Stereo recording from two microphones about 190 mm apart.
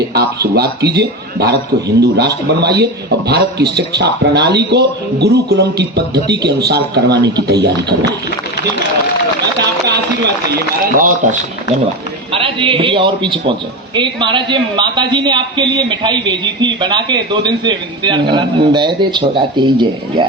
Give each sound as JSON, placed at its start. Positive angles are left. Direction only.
{"t": 0.1, "sound": "a man's voice", "side_deg": -55}
{"t": 10.8, "sound": "speech", "side_deg": -45}
{"t": 12.3, "sound": "a man's voice", "side_deg": -30}